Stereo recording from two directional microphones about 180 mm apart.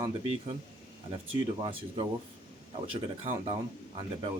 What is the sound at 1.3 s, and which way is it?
Speech, 30° right (ahead or behind).